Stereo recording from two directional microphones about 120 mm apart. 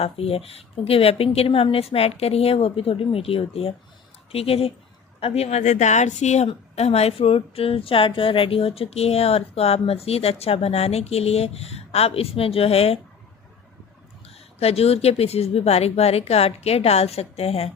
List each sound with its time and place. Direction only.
0.0 s a woman's voice: 55° left (ahead or behind); by 6.5 s 70° left (ahead or behind)
6.5 s speech: 60° left (ahead or behind)
14.3 s speech: 55° left (ahead or behind)